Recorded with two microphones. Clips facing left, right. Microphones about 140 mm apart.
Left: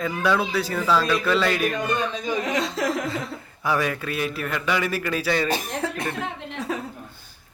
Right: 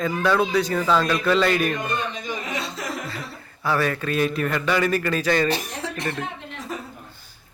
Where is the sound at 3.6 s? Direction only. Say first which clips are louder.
Right 1 dB; 10° left (ahead or behind).